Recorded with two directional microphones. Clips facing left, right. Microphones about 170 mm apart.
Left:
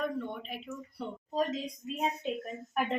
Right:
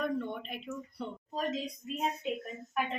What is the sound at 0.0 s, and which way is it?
Speech, 5° left (ahead or behind).